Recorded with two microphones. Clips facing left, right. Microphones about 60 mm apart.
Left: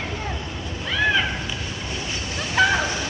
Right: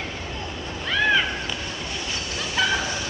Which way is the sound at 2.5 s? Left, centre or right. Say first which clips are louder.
Left 5 dB; left.